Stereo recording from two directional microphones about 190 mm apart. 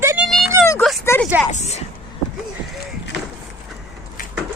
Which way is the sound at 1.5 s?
35° left (ahead or behind).